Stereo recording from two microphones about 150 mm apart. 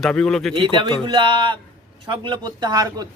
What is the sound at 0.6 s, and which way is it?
A man's voice, 35° right (ahead or behind).